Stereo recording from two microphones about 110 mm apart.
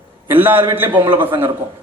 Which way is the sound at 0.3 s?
20° right (ahead or behind).